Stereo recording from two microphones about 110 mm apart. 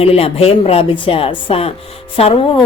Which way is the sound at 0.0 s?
60° left (ahead or behind).